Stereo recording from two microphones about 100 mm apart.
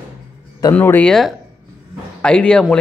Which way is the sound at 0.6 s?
40° left (ahead or behind).